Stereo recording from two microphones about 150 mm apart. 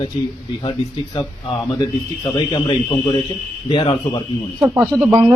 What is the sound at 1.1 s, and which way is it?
A man's voice, 30° left (ahead or behind).